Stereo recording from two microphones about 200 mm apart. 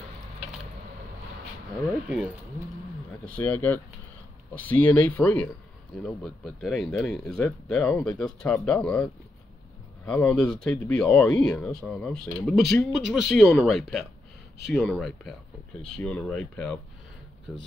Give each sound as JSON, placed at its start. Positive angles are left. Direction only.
{"t": 3.3, "sound": "speech", "side_deg": 10}
{"t": 10.0, "sound": "speech", "side_deg": 5}